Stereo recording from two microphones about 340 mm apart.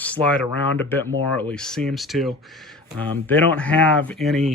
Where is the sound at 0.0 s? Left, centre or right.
Centre.